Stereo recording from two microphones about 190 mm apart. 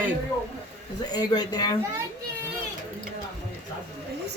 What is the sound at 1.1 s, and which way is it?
Speech, 20° left (ahead or behind).